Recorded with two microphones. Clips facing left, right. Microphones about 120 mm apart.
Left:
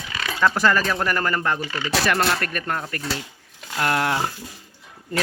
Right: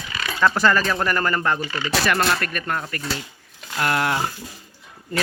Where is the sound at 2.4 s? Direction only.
35° left (ahead or behind).